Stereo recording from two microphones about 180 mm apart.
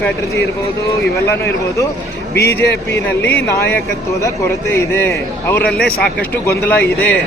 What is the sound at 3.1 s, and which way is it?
Speech, 10° left (ahead or behind).